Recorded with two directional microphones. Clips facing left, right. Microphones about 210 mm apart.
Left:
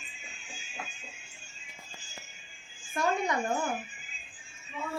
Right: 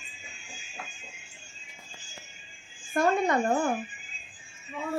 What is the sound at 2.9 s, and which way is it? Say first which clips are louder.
Laughter: right 5 dB; 55° right (ahead or behind).